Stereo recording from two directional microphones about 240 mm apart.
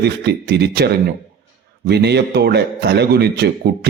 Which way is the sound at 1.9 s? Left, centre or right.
Right.